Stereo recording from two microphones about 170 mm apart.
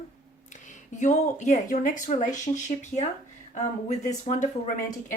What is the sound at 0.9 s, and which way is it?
Speech, 45° left (ahead or behind).